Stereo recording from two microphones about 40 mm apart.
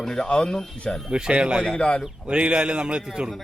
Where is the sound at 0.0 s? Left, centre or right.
Centre.